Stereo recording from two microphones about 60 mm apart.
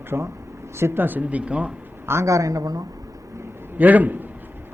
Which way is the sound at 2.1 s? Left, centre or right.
Right.